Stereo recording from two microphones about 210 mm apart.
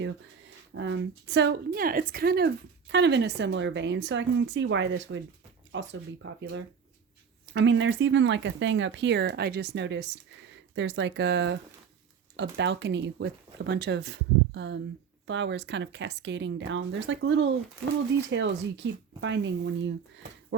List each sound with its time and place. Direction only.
0.7 s a woman's voice: 60° right (ahead or behind)